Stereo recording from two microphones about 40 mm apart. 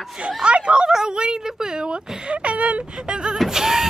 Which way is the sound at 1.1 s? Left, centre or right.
Right.